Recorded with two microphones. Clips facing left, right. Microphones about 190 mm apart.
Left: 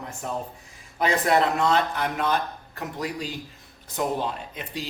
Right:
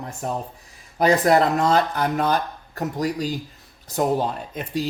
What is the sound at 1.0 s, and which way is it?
A man's voice, 40° right (ahead or behind).